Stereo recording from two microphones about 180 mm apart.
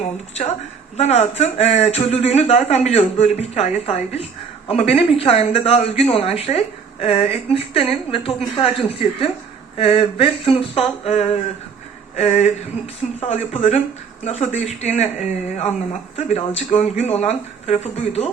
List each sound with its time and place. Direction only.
0.0 s speech: 35° left (ahead or behind)